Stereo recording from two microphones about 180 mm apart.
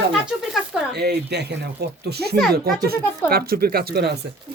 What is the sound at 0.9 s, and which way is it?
Speech, 65° right (ahead or behind).